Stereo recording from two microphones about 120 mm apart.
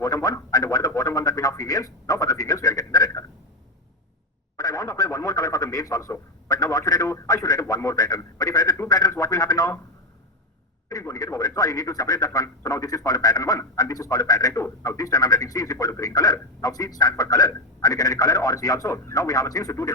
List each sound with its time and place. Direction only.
0.0 s a sound: 30° left (ahead or behind)
4.5 s radio: 30° left (ahead or behind)
10.8 s speech: 25° left (ahead or behind)